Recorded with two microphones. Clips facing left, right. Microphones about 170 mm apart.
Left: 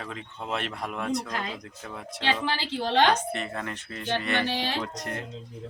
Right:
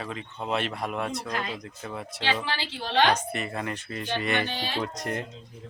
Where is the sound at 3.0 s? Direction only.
10° right (ahead or behind).